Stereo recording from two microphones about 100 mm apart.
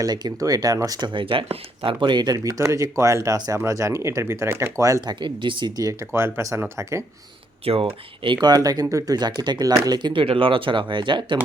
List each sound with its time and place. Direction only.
0.0 s speech: 45° right (ahead or behind)
5.0 s speech: 50° right (ahead or behind)
6.1 s speech: 25° right (ahead or behind)
7.6 s speech: 70° right (ahead or behind)
8.2 s speech: 50° right (ahead or behind)